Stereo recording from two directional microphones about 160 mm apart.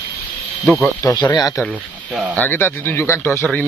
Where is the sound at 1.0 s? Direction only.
25° left (ahead or behind).